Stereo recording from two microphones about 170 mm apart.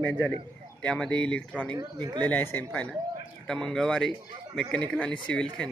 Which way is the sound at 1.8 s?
25° right (ahead or behind).